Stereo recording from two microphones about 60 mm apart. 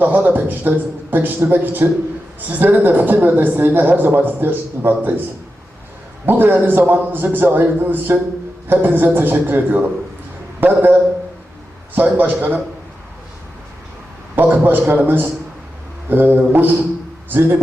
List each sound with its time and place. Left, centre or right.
0.0 s speech: right
6.2 s speech: right
12.1 s a man's voice: right
14.3 s speech: right